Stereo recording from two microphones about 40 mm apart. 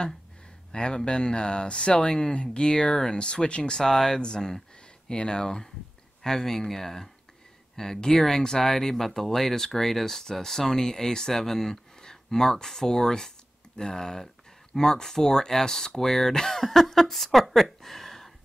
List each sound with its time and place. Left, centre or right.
0.7 s speech: left